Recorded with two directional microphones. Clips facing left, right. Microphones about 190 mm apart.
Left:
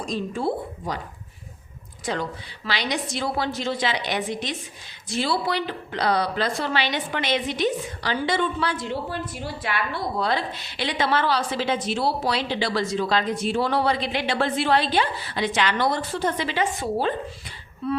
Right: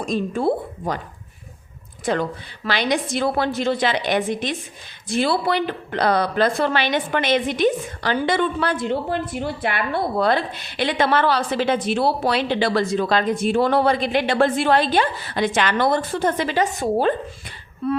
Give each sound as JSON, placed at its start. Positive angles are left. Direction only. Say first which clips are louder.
{"t": 0.0, "sound": "a woman's voice", "louder": "right 5 dB", "side_deg": -55}
{"t": 2.1, "sound": "a woman's voice", "louder": "right 6 dB", "side_deg": -55}